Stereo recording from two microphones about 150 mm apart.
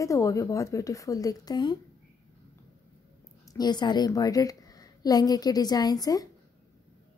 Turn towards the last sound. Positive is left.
turn(degrees=25)  # may be behind; listen again after turning